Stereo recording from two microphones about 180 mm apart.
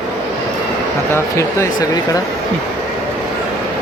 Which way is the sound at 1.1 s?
15° left (ahead or behind).